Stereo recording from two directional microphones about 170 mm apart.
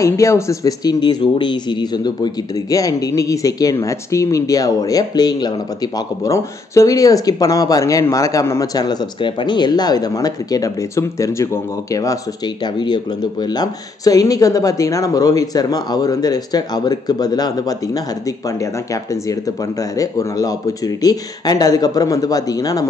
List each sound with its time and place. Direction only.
0.0 s speech: 15° left (ahead or behind)